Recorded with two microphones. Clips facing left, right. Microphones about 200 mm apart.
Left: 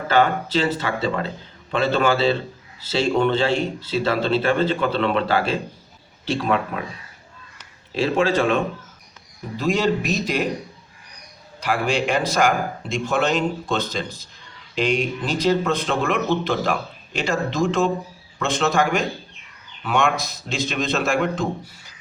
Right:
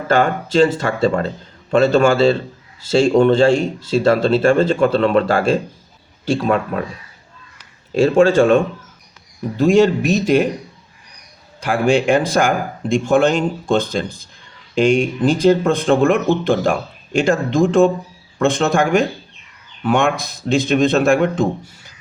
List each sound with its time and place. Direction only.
0.1 s speech: 45° right (ahead or behind)
8.2 s speech: 45° right (ahead or behind)
11.6 s speech: 50° right (ahead or behind)